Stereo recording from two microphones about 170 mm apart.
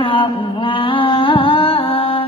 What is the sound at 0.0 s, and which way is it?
Mantra, 30° left (ahead or behind).